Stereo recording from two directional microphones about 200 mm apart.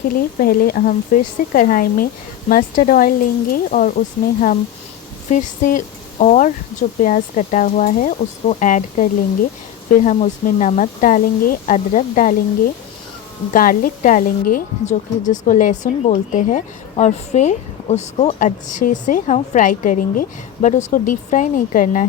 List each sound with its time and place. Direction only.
0.1 s a woman's voice: 45° left (ahead or behind)
13.5 s a woman's voice: 45° left (ahead or behind)